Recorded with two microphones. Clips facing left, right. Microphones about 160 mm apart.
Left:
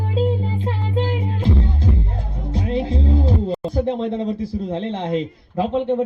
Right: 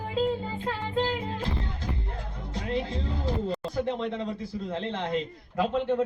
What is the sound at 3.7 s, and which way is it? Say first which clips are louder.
A man's voice: left 9 dB; 30° left (ahead or behind).